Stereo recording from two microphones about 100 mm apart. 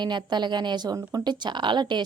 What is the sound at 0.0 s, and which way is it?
A woman's voice, 50° right (ahead or behind).